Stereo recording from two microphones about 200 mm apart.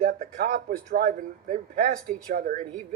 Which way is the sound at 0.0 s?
45° right (ahead or behind).